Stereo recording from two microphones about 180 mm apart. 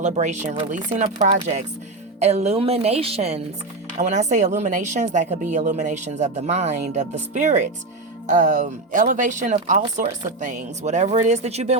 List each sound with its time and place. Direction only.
0.0 s a woman's voice: 40° right (ahead or behind)